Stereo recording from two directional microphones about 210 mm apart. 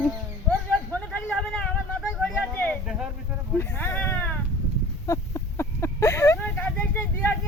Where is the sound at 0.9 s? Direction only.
5° left (ahead or behind).